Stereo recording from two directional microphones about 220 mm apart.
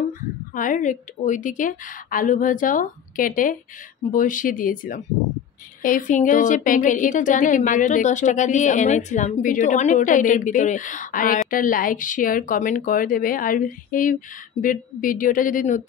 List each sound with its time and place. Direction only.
0.6 s a woman's voice: 35° left (ahead or behind)